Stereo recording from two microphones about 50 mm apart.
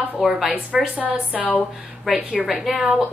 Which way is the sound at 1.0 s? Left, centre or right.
Right.